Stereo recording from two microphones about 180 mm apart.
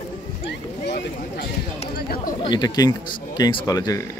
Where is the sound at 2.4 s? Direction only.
25° left (ahead or behind).